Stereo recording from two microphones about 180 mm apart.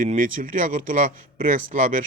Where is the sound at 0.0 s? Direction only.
45° right (ahead or behind).